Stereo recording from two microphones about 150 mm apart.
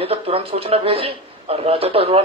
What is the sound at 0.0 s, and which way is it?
Speech, 40° right (ahead or behind).